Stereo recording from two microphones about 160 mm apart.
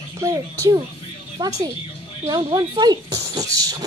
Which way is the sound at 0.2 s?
20° right (ahead or behind).